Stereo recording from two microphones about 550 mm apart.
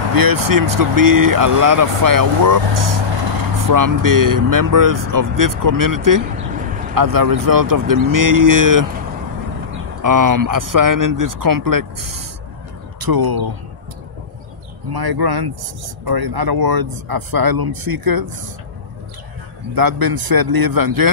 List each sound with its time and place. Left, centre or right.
0.1 s speech: right
10.0 s speech: right
14.9 s speech: right
19.7 s speech: right